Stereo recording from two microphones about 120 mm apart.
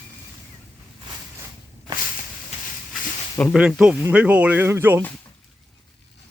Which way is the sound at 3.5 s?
10° right (ahead or behind).